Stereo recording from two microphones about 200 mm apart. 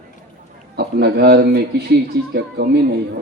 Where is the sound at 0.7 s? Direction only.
55° right (ahead or behind).